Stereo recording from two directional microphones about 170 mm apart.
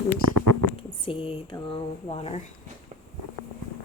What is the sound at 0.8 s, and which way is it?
Speech, 30° left (ahead or behind).